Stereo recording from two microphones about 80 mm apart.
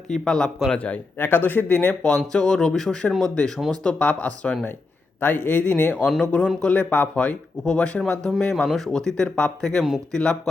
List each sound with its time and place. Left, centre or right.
0.1 s speech: centre